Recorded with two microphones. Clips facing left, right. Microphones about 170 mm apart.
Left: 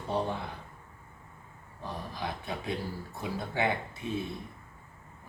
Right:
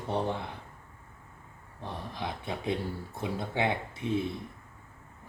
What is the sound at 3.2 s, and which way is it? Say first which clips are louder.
Speech: right 1 dB; 20° right (ahead or behind).